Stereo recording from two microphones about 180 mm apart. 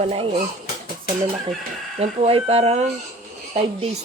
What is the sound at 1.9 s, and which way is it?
Speech, 35° right (ahead or behind).